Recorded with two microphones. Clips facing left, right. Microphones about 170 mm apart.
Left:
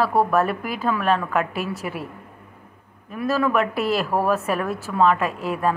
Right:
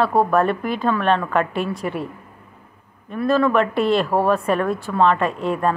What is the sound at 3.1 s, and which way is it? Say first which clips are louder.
A woman's voice: right 4 dB; 5° left (ahead or behind).